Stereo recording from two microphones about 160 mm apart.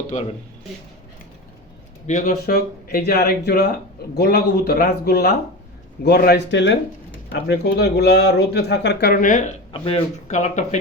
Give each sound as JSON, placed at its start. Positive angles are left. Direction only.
{"t": 0.1, "sound": "speech", "side_deg": 45}
{"t": 2.0, "sound": "speech", "side_deg": 45}
{"t": 2.5, "sound": "speech", "side_deg": 70}
{"t": 9.2, "sound": "speech", "side_deg": 50}
{"t": 9.7, "sound": "speech", "side_deg": 30}
{"t": 10.2, "sound": "speech", "side_deg": 45}